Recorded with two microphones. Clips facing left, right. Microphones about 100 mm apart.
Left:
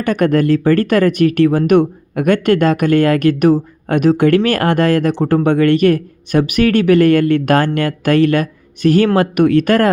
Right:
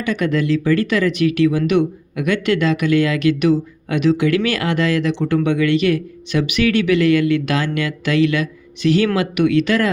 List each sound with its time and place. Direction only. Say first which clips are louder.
0.0 s speech: left 5 dB; 50° left (ahead or behind)